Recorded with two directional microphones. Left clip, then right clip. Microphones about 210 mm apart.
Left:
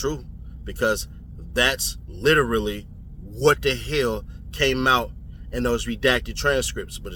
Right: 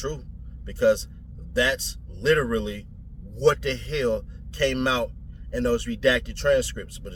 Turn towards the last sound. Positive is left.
turn(degrees=15)  # may be behind; listen again after turning